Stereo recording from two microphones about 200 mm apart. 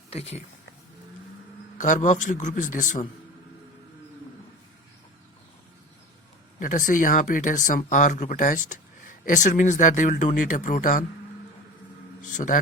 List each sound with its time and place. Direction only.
0.1 s speech: 30° left (ahead or behind)
1.8 s speech: 40° left (ahead or behind)
6.6 s speech: 40° left (ahead or behind)
12.2 s speech: 40° left (ahead or behind)